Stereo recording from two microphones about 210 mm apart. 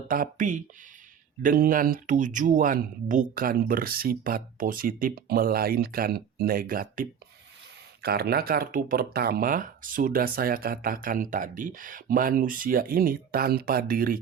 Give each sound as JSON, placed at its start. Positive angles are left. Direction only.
{"t": 0.1, "sound": "speech", "side_deg": -40}